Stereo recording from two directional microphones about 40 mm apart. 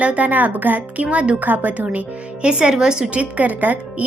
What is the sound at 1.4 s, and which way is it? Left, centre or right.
Speech, right.